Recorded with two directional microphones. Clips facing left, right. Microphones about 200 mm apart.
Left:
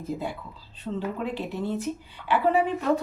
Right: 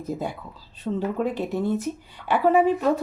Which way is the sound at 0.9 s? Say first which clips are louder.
Right 5 dB; 40° right (ahead or behind).